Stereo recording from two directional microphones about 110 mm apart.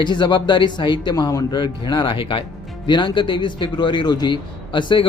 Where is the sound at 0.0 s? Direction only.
45° left (ahead or behind).